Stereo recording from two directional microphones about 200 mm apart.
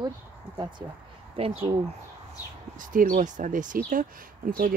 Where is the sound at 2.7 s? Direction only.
40° right (ahead or behind).